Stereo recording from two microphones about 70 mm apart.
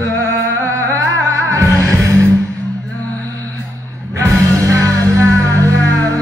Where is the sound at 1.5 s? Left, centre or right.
Right.